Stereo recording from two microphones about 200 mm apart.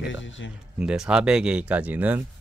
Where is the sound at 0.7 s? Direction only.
5° right (ahead or behind).